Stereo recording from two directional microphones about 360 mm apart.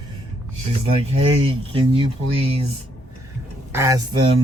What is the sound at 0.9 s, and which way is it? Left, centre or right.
Speech, centre.